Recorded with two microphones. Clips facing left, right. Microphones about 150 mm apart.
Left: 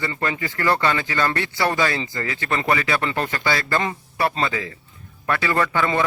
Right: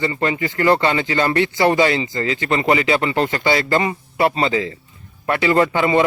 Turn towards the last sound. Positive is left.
turn(degrees=-20)  # may be behind; listen again after turning